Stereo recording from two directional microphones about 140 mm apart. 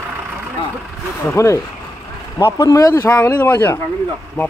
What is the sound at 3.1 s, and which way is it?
Speech, 10° left (ahead or behind).